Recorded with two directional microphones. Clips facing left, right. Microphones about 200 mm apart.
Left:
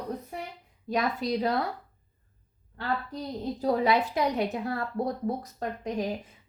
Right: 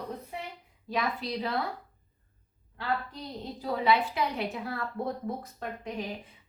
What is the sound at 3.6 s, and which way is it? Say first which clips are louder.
A woman's voice: left 2 dB; 45° left (ahead or behind).